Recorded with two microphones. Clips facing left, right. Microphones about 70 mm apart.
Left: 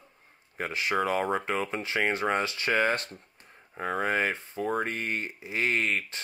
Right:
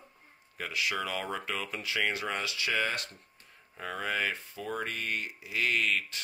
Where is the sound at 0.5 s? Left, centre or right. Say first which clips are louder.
Left 5 dB; left.